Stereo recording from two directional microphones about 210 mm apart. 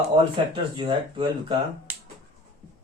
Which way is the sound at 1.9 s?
10° right (ahead or behind).